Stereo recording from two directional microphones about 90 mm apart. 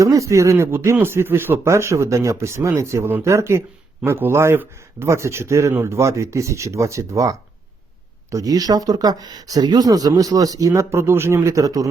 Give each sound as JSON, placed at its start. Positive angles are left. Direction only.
{"t": 0.0, "sound": "speech", "side_deg": -35}
{"t": 10.7, "sound": "speech", "side_deg": -30}